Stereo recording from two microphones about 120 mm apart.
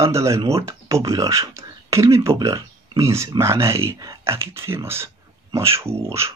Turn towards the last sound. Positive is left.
turn(degrees=-20)  # may be behind; listen again after turning